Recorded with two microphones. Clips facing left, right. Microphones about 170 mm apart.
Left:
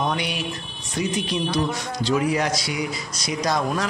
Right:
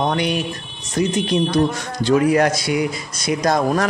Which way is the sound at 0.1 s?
50° right (ahead or behind).